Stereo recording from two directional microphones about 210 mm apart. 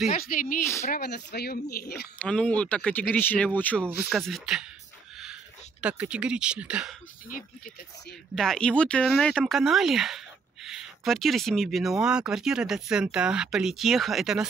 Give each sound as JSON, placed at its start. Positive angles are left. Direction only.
{"t": 0.1, "sound": "speech", "side_deg": 40}
{"t": 2.1, "sound": "speech", "side_deg": 5}
{"t": 7.2, "sound": "speech", "side_deg": 40}
{"t": 8.4, "sound": "speech", "side_deg": 5}